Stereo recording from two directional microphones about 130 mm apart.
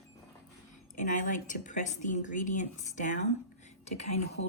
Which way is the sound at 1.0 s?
75° left (ahead or behind).